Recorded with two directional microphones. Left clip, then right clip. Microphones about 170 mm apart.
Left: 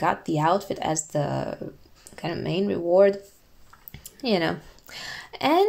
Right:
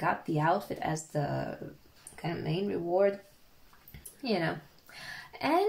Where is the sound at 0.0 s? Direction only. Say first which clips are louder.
Left 6 dB; 45° left (ahead or behind).